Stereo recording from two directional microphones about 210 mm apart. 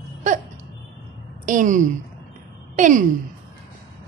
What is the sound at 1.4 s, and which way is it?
A woman's voice, 35° right (ahead or behind).